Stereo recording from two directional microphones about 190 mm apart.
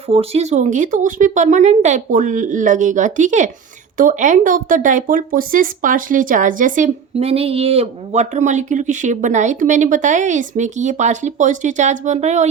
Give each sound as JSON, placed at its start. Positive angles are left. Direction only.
{"t": 0.1, "sound": "speech", "side_deg": -30}